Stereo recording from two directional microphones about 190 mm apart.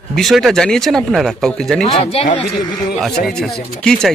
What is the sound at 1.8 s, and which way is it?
Speech, 35° left (ahead or behind).